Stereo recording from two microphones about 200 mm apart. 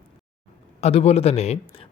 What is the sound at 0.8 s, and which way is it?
A man's voice, 30° left (ahead or behind).